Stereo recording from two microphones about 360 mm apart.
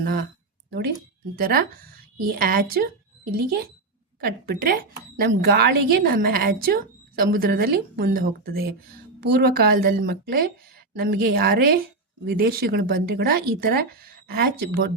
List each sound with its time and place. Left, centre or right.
0.0 s speech: right
1.4 s speech: right